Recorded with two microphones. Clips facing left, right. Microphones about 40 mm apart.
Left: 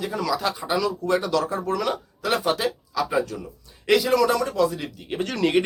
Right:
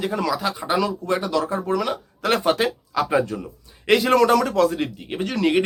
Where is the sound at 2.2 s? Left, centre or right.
Right.